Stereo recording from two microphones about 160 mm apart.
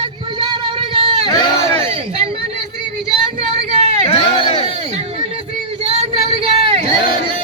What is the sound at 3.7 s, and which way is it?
Hubbub, 45° right (ahead or behind).